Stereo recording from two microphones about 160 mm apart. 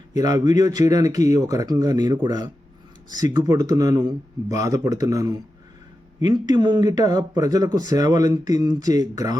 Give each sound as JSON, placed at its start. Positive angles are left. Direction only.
{"t": 0.2, "sound": "speech", "side_deg": -25}